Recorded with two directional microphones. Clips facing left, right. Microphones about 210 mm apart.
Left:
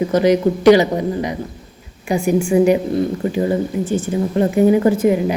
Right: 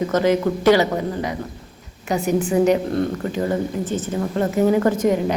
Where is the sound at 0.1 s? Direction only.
15° left (ahead or behind).